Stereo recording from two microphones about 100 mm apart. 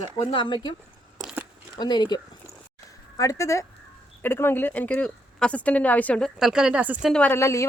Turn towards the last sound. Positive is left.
turn(degrees=30)  # may be behind; listen again after turning